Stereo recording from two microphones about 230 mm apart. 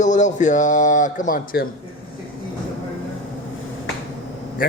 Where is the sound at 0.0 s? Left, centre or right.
Left.